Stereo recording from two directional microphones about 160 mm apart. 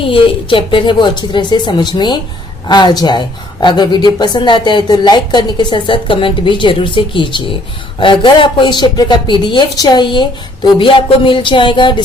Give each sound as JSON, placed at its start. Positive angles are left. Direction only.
{"t": 0.0, "sound": "a woman's voice", "side_deg": 35}